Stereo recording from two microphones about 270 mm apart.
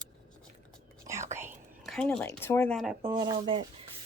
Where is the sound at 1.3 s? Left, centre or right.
Centre.